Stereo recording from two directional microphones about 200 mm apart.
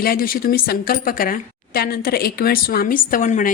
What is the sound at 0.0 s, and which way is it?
A woman's voice, 45° left (ahead or behind).